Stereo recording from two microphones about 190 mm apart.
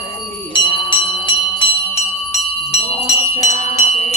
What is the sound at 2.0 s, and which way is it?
Music, 30° left (ahead or behind).